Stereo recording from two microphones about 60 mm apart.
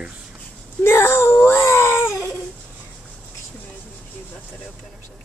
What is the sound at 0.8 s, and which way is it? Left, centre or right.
Baby cry, left.